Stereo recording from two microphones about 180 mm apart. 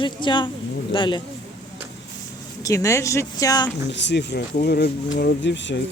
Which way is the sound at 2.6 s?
15° left (ahead or behind).